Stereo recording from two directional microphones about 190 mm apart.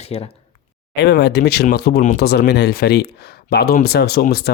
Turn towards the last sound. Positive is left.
turn(degrees=55)  # may be behind; listen again after turning